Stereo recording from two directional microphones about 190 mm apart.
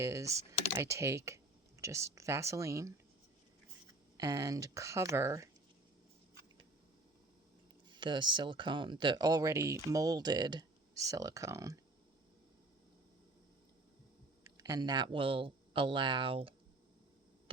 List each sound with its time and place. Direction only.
0.0 s speech: 15° right (ahead or behind)
4.2 s speech: 20° right (ahead or behind)
7.9 s speech: 25° right (ahead or behind)
14.4 s speech: 20° right (ahead or behind)